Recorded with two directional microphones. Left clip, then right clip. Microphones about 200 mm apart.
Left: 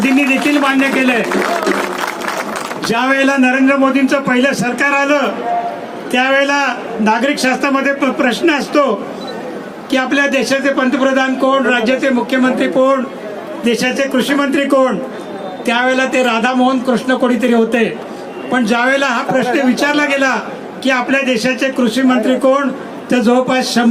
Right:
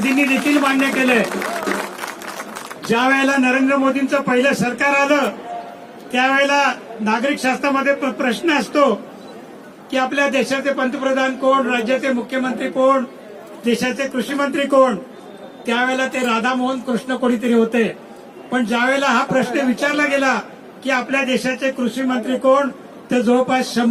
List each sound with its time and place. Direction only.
0.7 s a man's voice: 45° left (ahead or behind)
2.9 s a man's voice: 45° left (ahead or behind)
9.9 s a man's voice: 45° left (ahead or behind)